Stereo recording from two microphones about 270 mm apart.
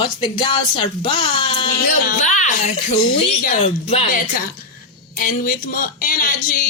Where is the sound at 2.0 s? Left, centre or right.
Left.